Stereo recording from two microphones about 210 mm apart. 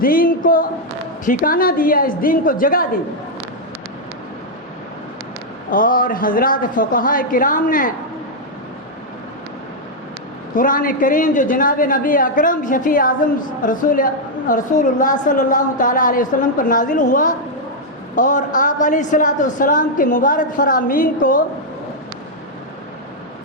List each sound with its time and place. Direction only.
0.0 s a woman's voice: 45° left (ahead or behind)
5.7 s a woman's voice: 40° left (ahead or behind)
10.5 s a woman's voice: 40° left (ahead or behind)